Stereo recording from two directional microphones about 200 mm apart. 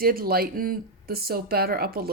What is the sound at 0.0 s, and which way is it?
Speech, 50° right (ahead or behind).